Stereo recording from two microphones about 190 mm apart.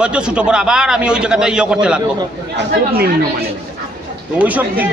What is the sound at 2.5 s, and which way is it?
Speech, 55° right (ahead or behind).